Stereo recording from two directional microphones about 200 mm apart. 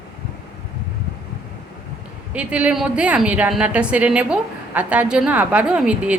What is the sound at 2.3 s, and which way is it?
A woman's voice, 5° right (ahead or behind).